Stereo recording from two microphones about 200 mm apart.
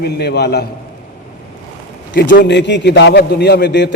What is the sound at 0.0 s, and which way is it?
Speech, 55° left (ahead or behind).